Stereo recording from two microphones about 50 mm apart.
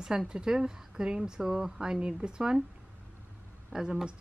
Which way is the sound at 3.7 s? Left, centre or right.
Centre.